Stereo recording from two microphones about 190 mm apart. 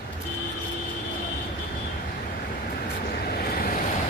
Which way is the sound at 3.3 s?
55° left (ahead or behind).